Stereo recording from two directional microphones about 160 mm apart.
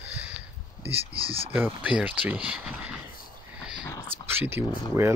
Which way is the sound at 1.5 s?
10° right (ahead or behind).